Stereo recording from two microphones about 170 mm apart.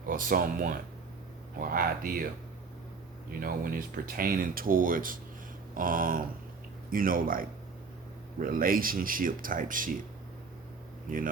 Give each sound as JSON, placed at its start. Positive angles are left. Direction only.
{"t": 0.0, "sound": "speech", "side_deg": -55}
{"t": 3.4, "sound": "speech", "side_deg": -55}
{"t": 11.1, "sound": "speech", "side_deg": -55}